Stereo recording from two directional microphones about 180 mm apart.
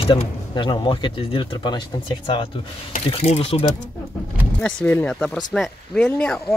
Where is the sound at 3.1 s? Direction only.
35° left (ahead or behind).